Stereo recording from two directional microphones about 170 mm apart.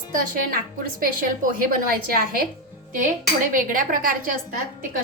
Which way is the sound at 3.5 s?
55° right (ahead or behind).